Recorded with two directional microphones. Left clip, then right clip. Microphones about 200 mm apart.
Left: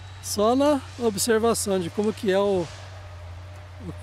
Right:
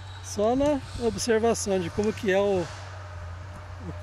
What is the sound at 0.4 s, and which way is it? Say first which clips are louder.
Speech: left 3 dB; 35° left (ahead or behind).